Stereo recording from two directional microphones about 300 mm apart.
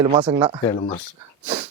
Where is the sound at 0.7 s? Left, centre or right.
Left.